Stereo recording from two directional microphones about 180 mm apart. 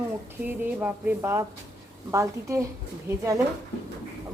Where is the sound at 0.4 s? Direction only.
10° right (ahead or behind).